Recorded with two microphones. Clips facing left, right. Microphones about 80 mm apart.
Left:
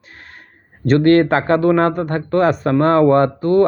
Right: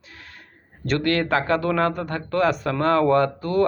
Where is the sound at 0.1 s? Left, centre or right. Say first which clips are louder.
Left 4 dB; left.